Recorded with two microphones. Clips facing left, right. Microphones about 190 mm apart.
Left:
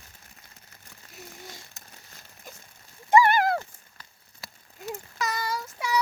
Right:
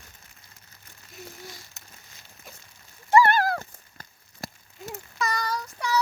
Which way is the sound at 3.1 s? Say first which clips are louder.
Even; 15° left (ahead or behind).